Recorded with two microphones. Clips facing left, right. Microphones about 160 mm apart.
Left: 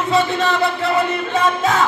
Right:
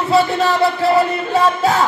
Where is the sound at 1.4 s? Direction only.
35° right (ahead or behind).